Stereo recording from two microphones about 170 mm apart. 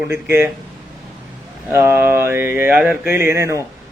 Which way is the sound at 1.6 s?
15° right (ahead or behind).